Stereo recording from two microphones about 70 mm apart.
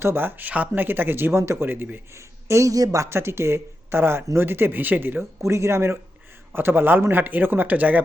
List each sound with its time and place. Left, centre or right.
0.0 s speech: right
2.1 s a man's voice: right
3.1 s speech: right
5.4 s a man's voice: right